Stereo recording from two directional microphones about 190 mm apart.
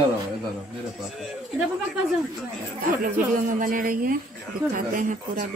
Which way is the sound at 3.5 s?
45° right (ahead or behind).